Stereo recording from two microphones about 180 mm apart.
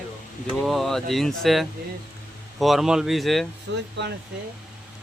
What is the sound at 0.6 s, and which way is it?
Speech, centre (ahead or behind).